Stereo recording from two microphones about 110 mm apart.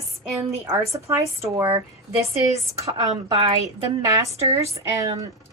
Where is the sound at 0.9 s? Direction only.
30° right (ahead or behind).